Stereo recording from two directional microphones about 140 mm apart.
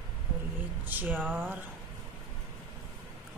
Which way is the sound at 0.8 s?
15° right (ahead or behind).